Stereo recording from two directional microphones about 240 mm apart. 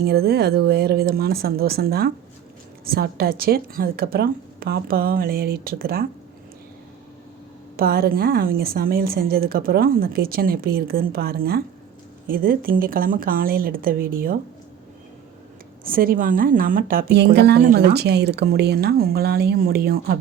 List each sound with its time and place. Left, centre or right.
0.0 s a woman's voice: right
7.8 s a woman's voice: right
15.8 s a woman's voice: right